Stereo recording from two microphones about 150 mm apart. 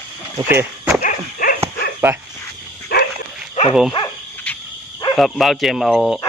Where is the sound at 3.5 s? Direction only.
45° left (ahead or behind).